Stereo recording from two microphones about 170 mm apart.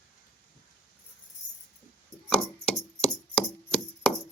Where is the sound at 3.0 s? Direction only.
10° left (ahead or behind).